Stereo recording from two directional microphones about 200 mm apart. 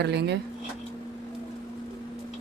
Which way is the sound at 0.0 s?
55° right (ahead or behind).